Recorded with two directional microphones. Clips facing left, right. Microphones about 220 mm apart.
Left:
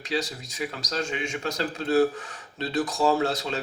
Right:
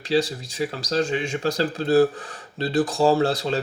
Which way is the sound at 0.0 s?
30° right (ahead or behind).